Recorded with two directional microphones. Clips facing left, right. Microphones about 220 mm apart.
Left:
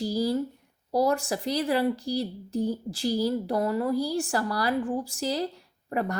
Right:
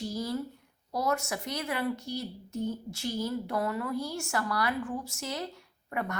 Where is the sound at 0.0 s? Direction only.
30° left (ahead or behind).